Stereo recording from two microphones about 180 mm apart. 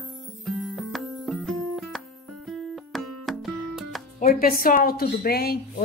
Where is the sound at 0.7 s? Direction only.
Centre (ahead or behind).